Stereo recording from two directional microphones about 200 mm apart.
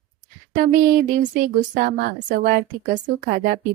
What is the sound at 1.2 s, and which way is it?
A woman's voice, 40° right (ahead or behind).